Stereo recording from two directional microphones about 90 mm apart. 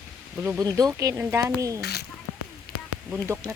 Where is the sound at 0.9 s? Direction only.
35° right (ahead or behind).